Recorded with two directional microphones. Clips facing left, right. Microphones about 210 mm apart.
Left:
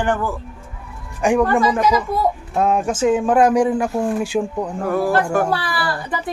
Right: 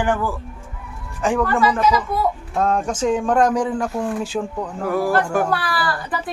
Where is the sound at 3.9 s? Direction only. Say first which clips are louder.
Left 3 dB; 25° left (ahead or behind).